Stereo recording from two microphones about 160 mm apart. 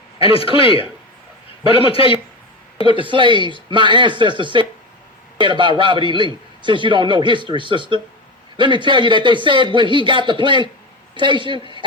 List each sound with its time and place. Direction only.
0.2 s speech: 35° left (ahead or behind)
2.9 s a man's voice: 30° right (ahead or behind)